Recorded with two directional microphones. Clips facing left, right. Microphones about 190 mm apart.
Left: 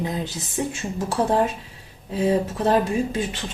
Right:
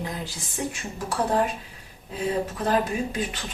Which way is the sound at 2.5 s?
30° left (ahead or behind).